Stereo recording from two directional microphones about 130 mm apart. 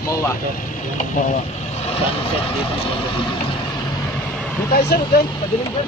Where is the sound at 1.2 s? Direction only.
90° left.